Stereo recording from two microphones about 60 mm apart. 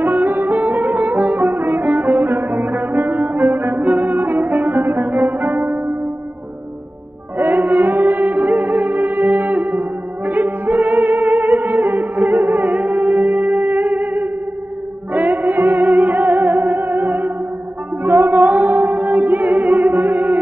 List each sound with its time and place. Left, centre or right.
0.0 s music: right
7.3 s music: right